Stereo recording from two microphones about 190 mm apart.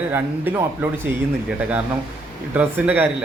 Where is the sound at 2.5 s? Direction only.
10° right (ahead or behind).